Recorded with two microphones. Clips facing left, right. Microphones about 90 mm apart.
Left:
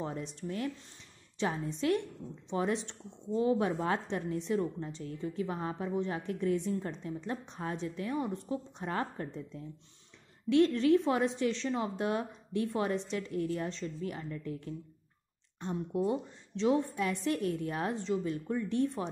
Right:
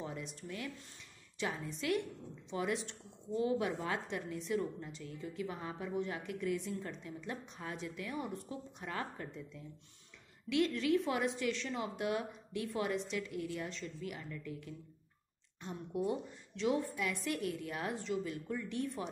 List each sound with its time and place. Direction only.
0.0 s a woman's voice: 35° left (ahead or behind)